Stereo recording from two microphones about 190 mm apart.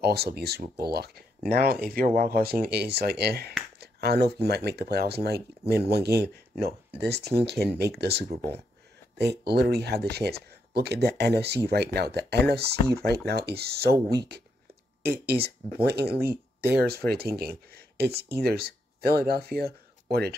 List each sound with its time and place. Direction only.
0.0 s speech: 55° right (ahead or behind)
16.3 s speech: 10° right (ahead or behind)
16.8 s speech: 55° right (ahead or behind)